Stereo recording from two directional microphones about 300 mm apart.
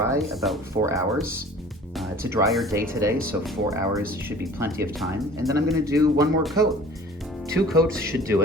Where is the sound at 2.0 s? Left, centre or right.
Centre.